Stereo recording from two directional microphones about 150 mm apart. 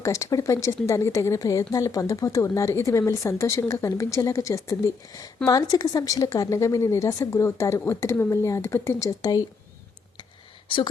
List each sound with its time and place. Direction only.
0.0 s speech: 20° left (ahead or behind)